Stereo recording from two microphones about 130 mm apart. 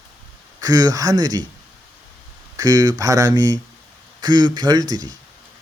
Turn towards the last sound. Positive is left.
turn(degrees=-30)  # may be behind; listen again after turning